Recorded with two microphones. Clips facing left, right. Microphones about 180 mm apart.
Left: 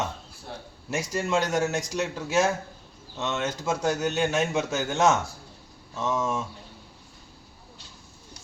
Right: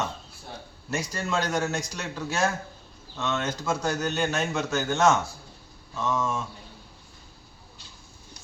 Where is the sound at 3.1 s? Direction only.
20° left (ahead or behind).